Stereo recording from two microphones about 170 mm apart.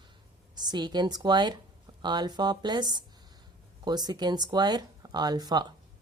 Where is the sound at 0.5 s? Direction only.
25° right (ahead or behind).